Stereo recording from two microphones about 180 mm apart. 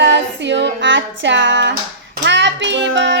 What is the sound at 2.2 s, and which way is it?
Child singing, 80° right.